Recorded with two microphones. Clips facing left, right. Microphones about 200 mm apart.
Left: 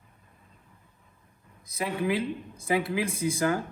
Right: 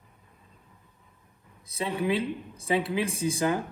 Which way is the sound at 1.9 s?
25° right (ahead or behind).